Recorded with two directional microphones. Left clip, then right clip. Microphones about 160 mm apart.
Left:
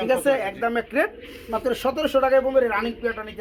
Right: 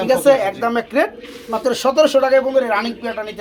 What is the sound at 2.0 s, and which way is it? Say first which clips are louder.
Speech: right 5 dB; 20° left (ahead or behind).